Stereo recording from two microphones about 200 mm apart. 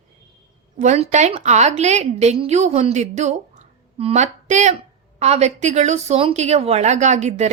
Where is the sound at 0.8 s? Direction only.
35° right (ahead or behind).